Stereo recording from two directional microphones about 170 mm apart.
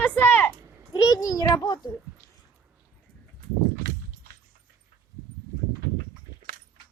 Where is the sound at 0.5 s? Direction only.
20° right (ahead or behind).